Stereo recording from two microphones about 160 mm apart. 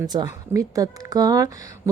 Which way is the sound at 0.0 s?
25° right (ahead or behind).